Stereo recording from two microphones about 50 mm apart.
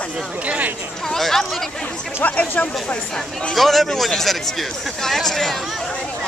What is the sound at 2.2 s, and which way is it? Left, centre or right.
Speech, left.